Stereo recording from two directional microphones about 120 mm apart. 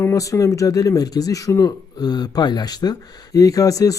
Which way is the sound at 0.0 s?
25° left (ahead or behind).